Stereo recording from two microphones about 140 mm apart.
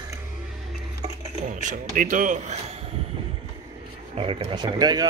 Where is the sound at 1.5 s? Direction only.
65° right (ahead or behind).